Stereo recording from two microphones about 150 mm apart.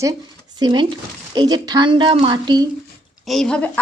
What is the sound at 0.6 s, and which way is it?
A woman's voice, 30° right (ahead or behind).